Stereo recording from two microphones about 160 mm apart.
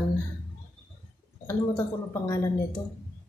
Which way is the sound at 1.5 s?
20° left (ahead or behind).